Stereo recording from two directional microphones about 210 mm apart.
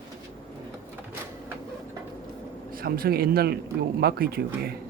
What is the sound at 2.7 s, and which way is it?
Speech, 45° right (ahead or behind).